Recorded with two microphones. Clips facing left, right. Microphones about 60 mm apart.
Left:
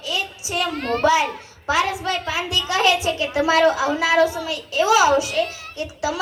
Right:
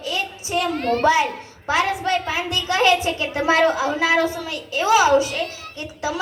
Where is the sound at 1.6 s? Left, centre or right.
Right.